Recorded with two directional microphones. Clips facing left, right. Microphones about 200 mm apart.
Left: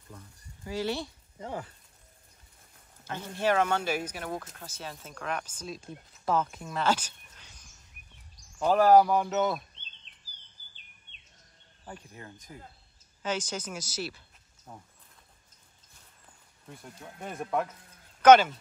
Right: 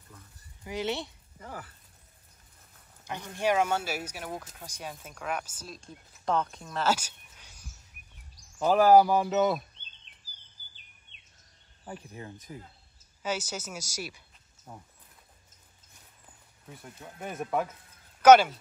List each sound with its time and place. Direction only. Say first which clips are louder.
0.7 s speech: left 1 dB; 20° right (ahead or behind)
1.4 s speech: left 5 dB; 25° left (ahead or behind)
3.1 s speech: even; 15° right (ahead or behind)
12.1 s speech: right 4 dB; 20° right (ahead or behind)
13.2 s speech: left 1 dB; 10° right (ahead or behind)
16.3 s speech: even; centre (ahead or behind)